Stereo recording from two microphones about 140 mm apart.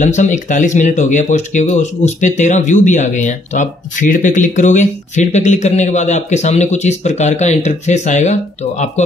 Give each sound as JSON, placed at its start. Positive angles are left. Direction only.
{"t": 0.0, "sound": "speech", "side_deg": 60}